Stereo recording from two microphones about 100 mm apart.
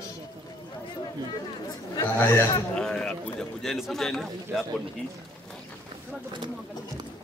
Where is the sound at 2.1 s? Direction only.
25° left (ahead or behind).